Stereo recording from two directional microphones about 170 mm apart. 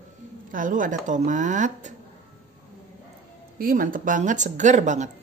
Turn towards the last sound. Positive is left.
turn(degrees=-45)  # may be behind; listen again after turning